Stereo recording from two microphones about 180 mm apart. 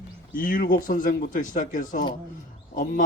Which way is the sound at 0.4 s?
50° left (ahead or behind).